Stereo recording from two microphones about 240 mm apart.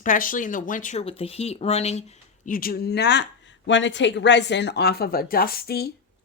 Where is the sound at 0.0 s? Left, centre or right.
Left.